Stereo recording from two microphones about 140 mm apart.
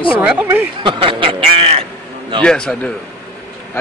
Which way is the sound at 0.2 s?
10° right (ahead or behind).